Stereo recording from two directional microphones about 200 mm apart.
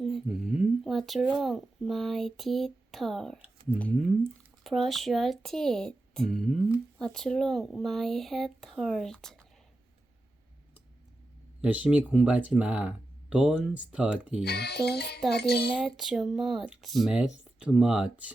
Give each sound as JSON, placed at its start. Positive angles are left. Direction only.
{"t": 0.6, "sound": "speech", "side_deg": 0}
{"t": 11.6, "sound": "speech", "side_deg": -5}
{"t": 14.4, "sound": "music", "side_deg": 55}
{"t": 15.7, "sound": "speech", "side_deg": -5}